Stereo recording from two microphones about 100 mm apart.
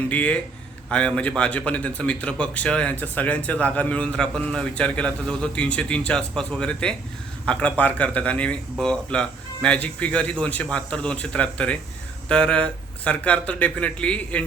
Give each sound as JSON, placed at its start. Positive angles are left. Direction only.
{"t": 0.1, "sound": "speech", "side_deg": 15}